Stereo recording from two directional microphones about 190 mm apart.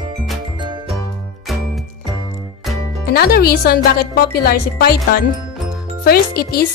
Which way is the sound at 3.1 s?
55° left (ahead or behind).